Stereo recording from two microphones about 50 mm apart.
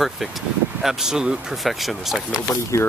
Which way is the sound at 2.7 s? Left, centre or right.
Left.